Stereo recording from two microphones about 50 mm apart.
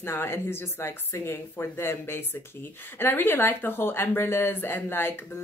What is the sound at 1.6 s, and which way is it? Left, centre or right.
Speech, left.